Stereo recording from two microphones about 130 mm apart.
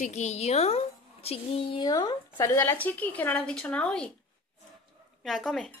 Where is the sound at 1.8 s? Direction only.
35° left (ahead or behind).